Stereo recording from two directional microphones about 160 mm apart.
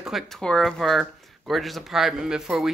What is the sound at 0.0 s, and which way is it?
Speech, centre (ahead or behind).